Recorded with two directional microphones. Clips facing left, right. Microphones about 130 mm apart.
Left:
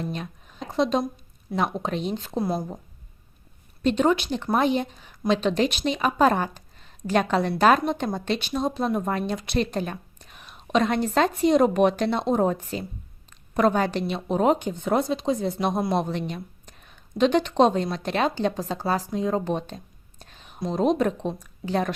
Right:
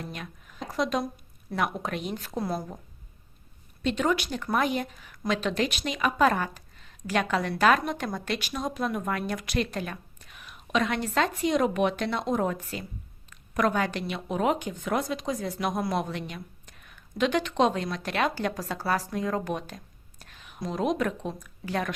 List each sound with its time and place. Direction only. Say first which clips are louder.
0.0 s speech: left 7 dB; 30° left (ahead or behind)
3.8 s speech: left 5 dB; 30° left (ahead or behind)